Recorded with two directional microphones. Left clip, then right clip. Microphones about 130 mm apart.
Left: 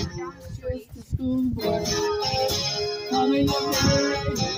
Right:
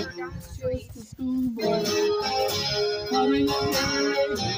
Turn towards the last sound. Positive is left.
turn(degrees=-35)  # may be behind; listen again after turning